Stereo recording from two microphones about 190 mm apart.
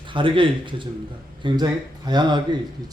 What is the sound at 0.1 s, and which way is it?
Speech, 25° right (ahead or behind).